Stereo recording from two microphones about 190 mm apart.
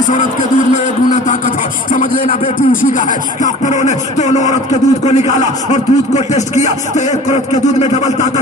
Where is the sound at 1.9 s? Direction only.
45° left (ahead or behind).